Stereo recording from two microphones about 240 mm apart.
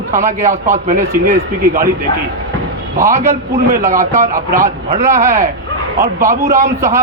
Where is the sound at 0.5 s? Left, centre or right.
Right.